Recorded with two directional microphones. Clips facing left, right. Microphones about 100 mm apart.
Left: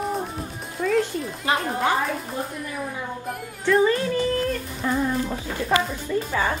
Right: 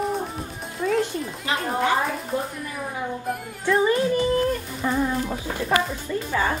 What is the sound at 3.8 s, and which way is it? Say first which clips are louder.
Yodeling: right 1 dB; 20° right (ahead or behind).